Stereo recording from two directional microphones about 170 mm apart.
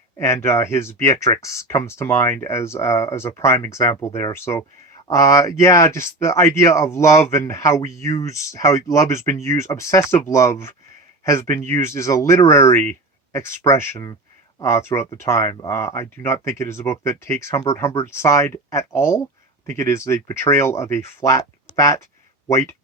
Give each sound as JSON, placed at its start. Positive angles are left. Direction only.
{"t": 0.2, "sound": "speech", "side_deg": 15}